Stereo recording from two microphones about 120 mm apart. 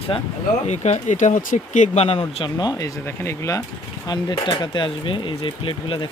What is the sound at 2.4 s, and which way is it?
Speech, 35° left (ahead or behind).